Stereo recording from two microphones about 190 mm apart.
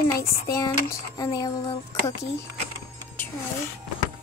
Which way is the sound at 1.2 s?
20° left (ahead or behind).